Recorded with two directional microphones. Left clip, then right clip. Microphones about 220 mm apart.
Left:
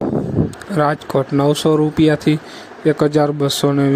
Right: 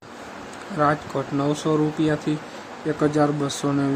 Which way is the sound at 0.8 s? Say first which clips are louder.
Left 5 dB; 40° left (ahead or behind).